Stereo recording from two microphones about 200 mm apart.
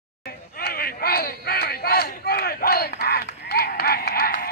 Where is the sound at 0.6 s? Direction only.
50° left (ahead or behind).